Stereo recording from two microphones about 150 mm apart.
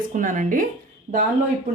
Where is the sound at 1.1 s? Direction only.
45° right (ahead or behind).